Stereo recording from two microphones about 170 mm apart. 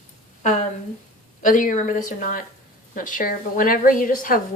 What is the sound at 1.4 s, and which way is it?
A woman's voice, 50° left (ahead or behind).